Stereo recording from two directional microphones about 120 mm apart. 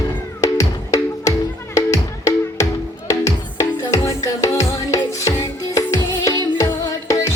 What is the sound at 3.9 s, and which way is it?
Music, 25° left (ahead or behind).